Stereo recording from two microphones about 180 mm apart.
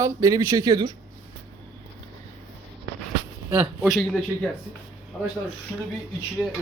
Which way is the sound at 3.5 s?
10° right (ahead or behind).